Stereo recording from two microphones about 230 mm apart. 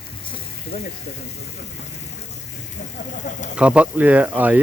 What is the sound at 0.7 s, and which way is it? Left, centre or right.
Speech, left.